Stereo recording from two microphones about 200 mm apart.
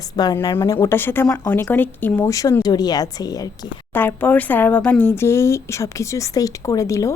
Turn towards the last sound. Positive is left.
turn(degrees=15)  # may be behind; listen again after turning